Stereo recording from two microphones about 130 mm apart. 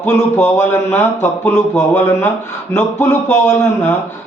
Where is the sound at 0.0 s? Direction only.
15° left (ahead or behind).